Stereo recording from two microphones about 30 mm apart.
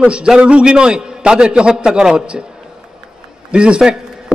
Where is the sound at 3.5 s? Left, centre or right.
Right.